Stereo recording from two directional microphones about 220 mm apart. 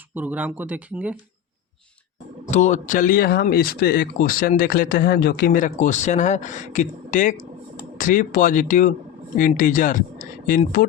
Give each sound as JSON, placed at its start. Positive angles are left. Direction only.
{"t": 0.1, "sound": "speech", "side_deg": -10}
{"t": 2.5, "sound": "speech", "side_deg": 35}